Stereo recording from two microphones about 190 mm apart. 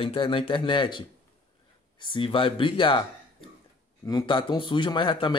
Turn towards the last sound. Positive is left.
turn(degrees=25)  # may be behind; listen again after turning